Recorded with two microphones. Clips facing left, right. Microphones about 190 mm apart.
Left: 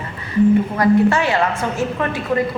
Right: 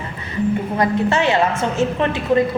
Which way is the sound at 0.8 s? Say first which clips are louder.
Left 3 dB; 20° right (ahead or behind).